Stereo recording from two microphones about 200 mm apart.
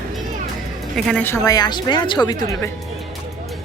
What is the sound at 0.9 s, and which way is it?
A woman's voice, 5° left (ahead or behind).